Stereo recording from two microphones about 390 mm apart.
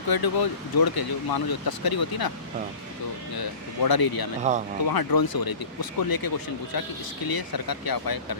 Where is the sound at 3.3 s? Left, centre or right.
Left.